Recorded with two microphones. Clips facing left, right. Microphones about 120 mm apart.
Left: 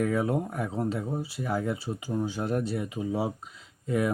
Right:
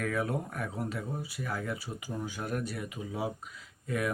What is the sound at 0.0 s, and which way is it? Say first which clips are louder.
Speech: left 6 dB; 25° left (ahead or behind).